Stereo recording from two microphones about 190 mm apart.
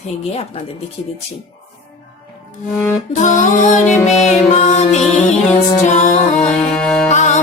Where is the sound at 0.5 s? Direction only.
30° left (ahead or behind).